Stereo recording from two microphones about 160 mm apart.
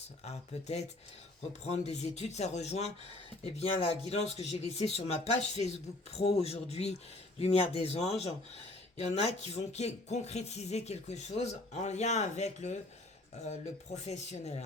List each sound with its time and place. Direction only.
0.3 s speech: 40° left (ahead or behind)